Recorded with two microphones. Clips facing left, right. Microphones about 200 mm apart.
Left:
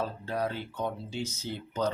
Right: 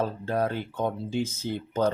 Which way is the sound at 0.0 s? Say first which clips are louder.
Right 5 dB; 50° right (ahead or behind).